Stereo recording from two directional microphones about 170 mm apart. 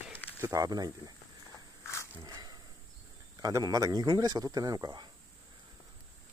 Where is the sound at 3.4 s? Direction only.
20° right (ahead or behind).